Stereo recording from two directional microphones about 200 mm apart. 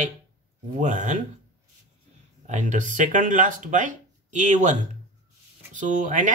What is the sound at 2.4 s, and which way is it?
Speech, 35° right (ahead or behind).